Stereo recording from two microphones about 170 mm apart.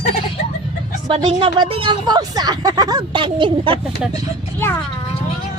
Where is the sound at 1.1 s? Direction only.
30° right (ahead or behind).